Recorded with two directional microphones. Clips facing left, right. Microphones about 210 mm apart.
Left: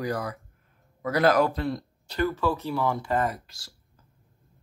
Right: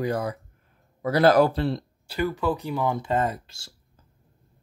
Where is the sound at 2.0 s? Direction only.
10° right (ahead or behind).